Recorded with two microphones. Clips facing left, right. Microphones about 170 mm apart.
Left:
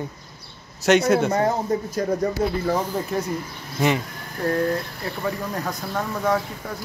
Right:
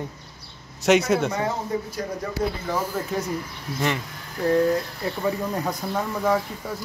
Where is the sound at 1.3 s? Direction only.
45° left (ahead or behind).